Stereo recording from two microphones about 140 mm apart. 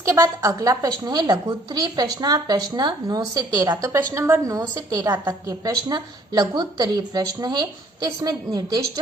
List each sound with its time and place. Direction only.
0.0 s a woman's voice: 20° right (ahead or behind)
5.1 s a woman's voice: 15° right (ahead or behind)
5.9 s a woman's voice: 30° right (ahead or behind)